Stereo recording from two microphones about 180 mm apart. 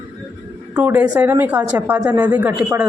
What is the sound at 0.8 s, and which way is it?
A woman's voice, 10° right (ahead or behind).